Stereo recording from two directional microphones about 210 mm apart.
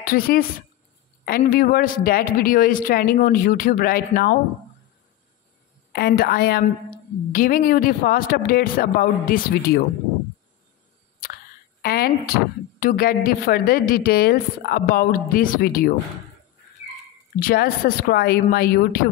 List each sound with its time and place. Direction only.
0.0 s a woman's voice: 45° left (ahead or behind)
5.9 s a woman's voice: 45° left (ahead or behind)
11.8 s a woman's voice: 45° left (ahead or behind)
17.4 s a woman's voice: 45° left (ahead or behind)